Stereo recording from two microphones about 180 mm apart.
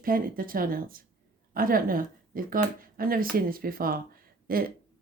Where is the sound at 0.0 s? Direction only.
50° right (ahead or behind).